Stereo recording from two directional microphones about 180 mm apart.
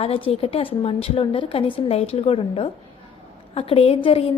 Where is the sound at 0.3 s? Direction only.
30° left (ahead or behind).